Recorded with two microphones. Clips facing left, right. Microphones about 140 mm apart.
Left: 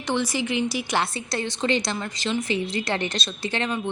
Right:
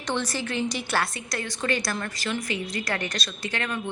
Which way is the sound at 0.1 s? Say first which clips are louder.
Left 4 dB; 10° left (ahead or behind).